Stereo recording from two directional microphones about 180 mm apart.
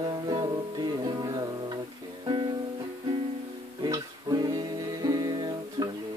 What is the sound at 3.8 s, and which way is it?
Music, 20° right (ahead or behind).